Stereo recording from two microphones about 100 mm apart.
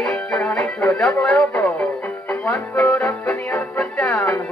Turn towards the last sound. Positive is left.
turn(degrees=10)  # may be behind; listen again after turning